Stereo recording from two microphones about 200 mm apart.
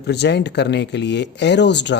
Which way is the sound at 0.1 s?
55° left (ahead or behind).